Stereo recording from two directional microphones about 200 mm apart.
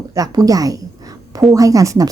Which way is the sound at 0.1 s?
15° right (ahead or behind).